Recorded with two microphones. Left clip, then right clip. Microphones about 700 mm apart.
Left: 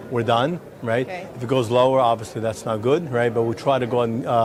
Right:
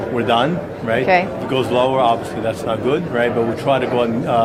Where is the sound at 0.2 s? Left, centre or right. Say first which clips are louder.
Right 3 dB; left.